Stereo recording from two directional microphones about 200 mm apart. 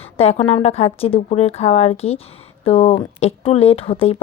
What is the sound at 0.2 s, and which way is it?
A woman's voice, 30° left (ahead or behind).